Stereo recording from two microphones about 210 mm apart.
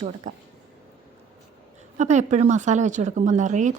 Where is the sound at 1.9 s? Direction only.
35° right (ahead or behind).